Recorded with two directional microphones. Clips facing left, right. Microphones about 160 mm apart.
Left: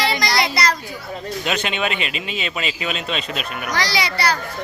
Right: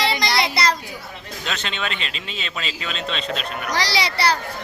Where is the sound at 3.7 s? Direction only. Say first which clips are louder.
Left 1 dB; 35° right (ahead or behind).